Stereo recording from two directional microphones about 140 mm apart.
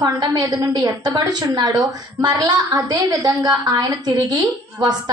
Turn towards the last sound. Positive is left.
turn(degrees=-30)  # may be behind; listen again after turning